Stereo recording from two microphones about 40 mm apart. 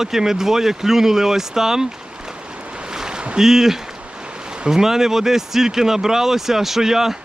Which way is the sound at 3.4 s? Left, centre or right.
Centre.